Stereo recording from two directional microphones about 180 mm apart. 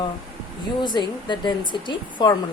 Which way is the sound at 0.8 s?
25° left (ahead or behind).